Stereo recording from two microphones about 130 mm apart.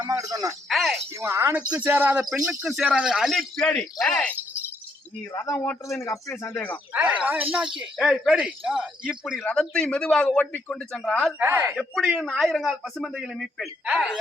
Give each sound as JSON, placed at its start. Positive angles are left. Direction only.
{"t": 0.0, "sound": "a sound", "side_deg": -25}
{"t": 0.7, "sound": "speech", "side_deg": 0}
{"t": 1.2, "sound": "speech", "side_deg": -20}
{"t": 5.4, "sound": "speech", "side_deg": 15}
{"t": 6.9, "sound": "speech", "side_deg": -10}
{"t": 9.4, "sound": "speech", "side_deg": 10}
{"t": 11.3, "sound": "speech", "side_deg": -15}
{"t": 11.8, "sound": "speech", "side_deg": 0}